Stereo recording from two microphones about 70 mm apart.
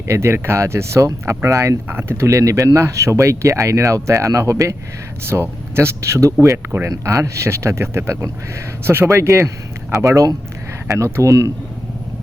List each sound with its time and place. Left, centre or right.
0.1 s speech: right
1.9 s speech: right
5.2 s speech: right